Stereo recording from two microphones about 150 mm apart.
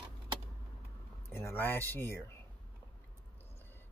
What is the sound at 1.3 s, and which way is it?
Speech, 15° left (ahead or behind).